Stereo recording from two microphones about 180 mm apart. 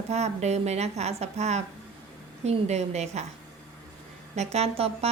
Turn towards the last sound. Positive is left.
turn(degrees=-35)  # may be behind; listen again after turning